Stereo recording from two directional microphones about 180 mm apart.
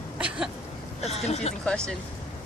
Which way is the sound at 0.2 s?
5° right (ahead or behind).